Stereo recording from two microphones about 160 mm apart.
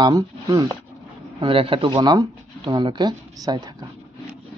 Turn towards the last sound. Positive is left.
turn(degrees=-25)  # may be behind; listen again after turning